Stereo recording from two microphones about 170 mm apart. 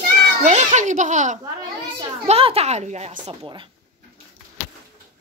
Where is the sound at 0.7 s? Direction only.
45° right (ahead or behind).